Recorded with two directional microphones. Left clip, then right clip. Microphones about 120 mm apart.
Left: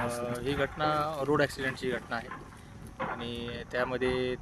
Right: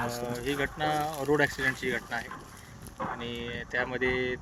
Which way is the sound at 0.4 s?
45° left (ahead or behind).